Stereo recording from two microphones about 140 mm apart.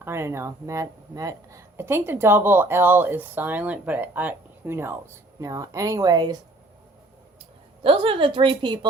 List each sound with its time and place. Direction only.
0.0 s speech: 20° right (ahead or behind)
7.9 s a woman's voice: 40° right (ahead or behind)